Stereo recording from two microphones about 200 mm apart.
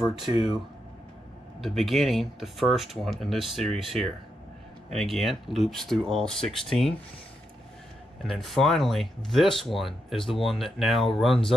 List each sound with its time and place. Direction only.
1.6 s speech: centre (ahead or behind)
8.2 s speech: centre (ahead or behind)